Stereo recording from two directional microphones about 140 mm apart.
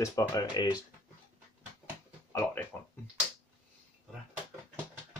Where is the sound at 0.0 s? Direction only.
20° left (ahead or behind).